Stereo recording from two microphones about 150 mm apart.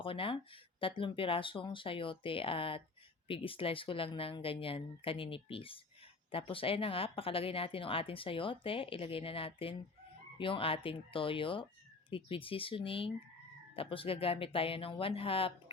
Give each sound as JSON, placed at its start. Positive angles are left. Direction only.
{"t": 0.0, "sound": "speech", "side_deg": 35}